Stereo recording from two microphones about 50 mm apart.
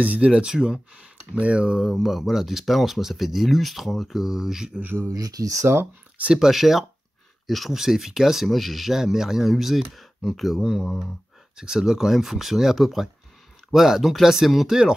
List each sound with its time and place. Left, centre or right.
0.0 s speech: right
1.3 s speech: right
1.9 s speech: centre
5.6 s speech: right
6.3 s speech: centre
11.5 s speech: centre